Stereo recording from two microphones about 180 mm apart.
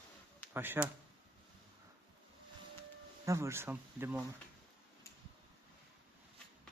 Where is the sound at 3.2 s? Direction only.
15° right (ahead or behind).